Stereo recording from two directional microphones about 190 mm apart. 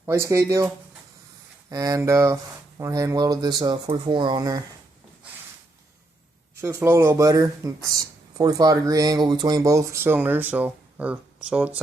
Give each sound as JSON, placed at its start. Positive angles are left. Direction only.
{"t": 0.0, "sound": "speech", "side_deg": -15}
{"t": 1.7, "sound": "speech", "side_deg": -20}
{"t": 6.6, "sound": "speech", "side_deg": -15}